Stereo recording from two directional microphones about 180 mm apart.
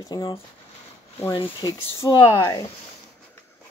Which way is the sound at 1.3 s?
30° left (ahead or behind).